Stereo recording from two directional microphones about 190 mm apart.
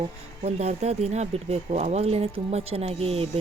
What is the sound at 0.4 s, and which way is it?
Speech, 35° right (ahead or behind).